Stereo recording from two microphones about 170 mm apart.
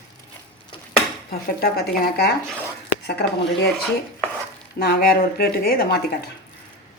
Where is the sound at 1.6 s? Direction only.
70° left (ahead or behind).